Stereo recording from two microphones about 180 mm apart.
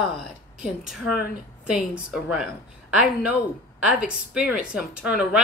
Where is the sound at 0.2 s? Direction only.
Centre (ahead or behind).